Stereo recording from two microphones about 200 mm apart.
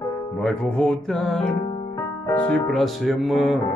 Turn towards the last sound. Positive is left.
turn(degrees=0)  # may be behind; listen again after turning